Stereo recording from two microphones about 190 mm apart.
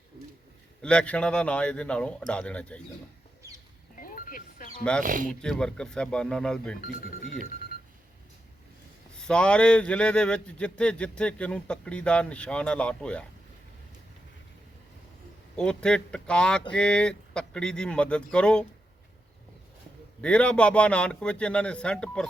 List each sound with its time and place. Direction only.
0.8 s a man's voice: 5° left (ahead or behind)
3.9 s wild animals: 45° left (ahead or behind)
4.8 s a man's voice: 5° left (ahead or behind)
5.0 s speech: 45° right (ahead or behind)
5.3 s a man's voice: 5° left (ahead or behind)
9.2 s a man's voice: 5° left (ahead or behind)
15.5 s a man's voice: 5° left (ahead or behind)
20.2 s a man's voice: 5° left (ahead or behind)